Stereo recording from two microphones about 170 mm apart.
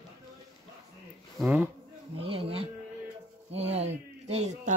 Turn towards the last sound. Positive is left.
turn(degrees=-40)  # may be behind; listen again after turning